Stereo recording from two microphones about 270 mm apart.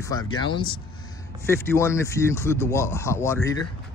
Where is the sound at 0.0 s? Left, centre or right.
Centre.